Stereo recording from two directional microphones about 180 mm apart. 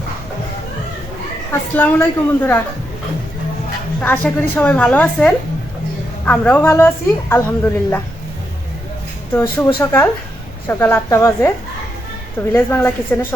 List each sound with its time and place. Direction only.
1.7 s speech: 10° left (ahead or behind)
4.0 s speech: 10° left (ahead or behind)
9.3 s speech: 10° left (ahead or behind)
12.5 s speech: 10° left (ahead or behind)